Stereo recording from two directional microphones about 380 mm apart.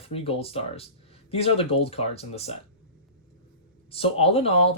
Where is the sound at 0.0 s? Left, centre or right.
Centre.